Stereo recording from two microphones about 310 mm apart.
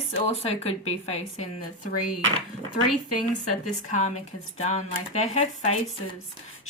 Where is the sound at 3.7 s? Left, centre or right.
Left.